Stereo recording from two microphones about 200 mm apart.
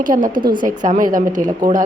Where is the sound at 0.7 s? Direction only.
40° right (ahead or behind).